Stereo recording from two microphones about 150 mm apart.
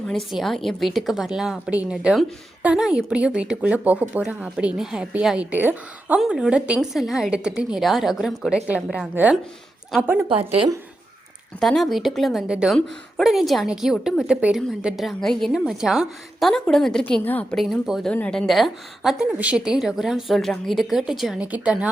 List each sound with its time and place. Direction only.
0.3 s a woman's voice: centre (ahead or behind)
10.2 s a woman's voice: 35° right (ahead or behind)
11.6 s a woman's voice: centre (ahead or behind)